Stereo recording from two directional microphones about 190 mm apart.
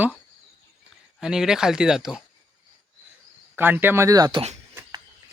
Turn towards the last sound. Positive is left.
turn(degrees=-20)  # may be behind; listen again after turning